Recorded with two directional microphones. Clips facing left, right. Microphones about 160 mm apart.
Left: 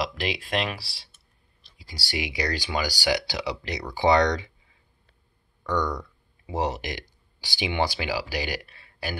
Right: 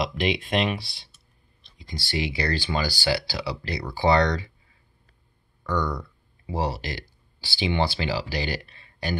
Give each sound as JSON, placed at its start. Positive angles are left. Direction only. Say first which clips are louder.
{"t": 0.0, "sound": "speech", "louder": "right 4 dB", "side_deg": 0}
{"t": 5.7, "sound": "speech", "louder": "even", "side_deg": 15}